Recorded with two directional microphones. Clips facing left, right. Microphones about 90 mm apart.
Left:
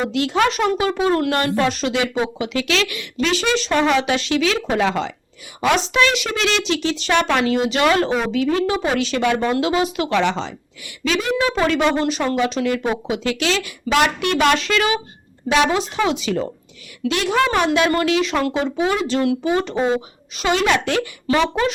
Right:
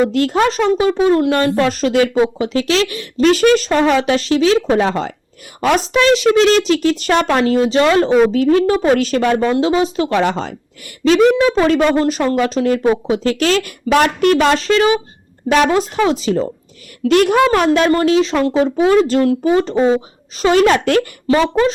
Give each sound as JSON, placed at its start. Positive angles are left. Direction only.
{"t": 0.1, "sound": "speech", "side_deg": -45}
{"t": 3.7, "sound": "a woman's voice", "side_deg": -35}
{"t": 9.5, "sound": "speech", "side_deg": -30}
{"t": 11.5, "sound": "speech", "side_deg": -40}
{"t": 15.4, "sound": "speech", "side_deg": -45}
{"t": 17.0, "sound": "a woman's voice", "side_deg": -50}
{"t": 17.7, "sound": "speech", "side_deg": -35}
{"t": 18.6, "sound": "a woman's voice", "side_deg": -40}
{"t": 21.2, "sound": "a woman's voice", "side_deg": -30}